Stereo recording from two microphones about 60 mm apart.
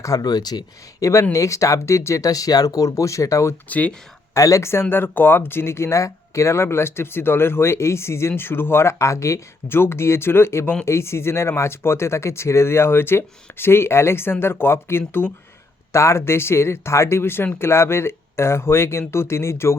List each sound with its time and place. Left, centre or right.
0.0 s speech: left
0.9 s speech: left
2.2 s speech: left
3.7 s speech: left
4.4 s speech: left
4.7 s speech: left
8.3 s speech: left
9.6 s speech: left
15.9 s speech: left